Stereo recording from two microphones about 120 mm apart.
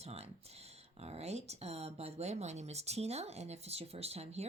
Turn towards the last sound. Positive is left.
turn(degrees=-60)  # may be behind; listen again after turning